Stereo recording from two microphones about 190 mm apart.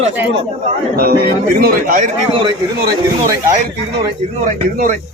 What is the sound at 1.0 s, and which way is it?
Speech, 55° right (ahead or behind).